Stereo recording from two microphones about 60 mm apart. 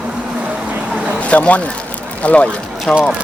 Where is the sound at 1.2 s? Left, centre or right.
Left.